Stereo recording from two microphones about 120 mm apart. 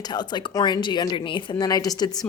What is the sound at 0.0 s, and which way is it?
Speech, 35° left (ahead or behind).